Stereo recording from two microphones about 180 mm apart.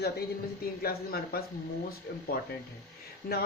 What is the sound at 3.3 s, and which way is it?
Speech, 55° left (ahead or behind).